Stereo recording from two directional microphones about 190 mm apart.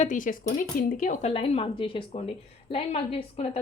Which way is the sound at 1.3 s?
30° left (ahead or behind).